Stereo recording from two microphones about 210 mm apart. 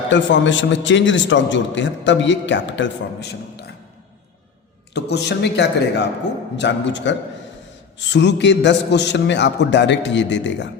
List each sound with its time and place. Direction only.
0.1 s a man's voice: 60° left (ahead or behind)
4.9 s a man's voice: 55° left (ahead or behind)